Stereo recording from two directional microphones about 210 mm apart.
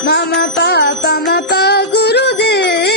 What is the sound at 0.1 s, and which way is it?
Music, 55° left (ahead or behind).